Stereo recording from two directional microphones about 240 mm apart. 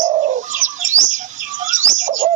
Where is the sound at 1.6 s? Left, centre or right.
Right.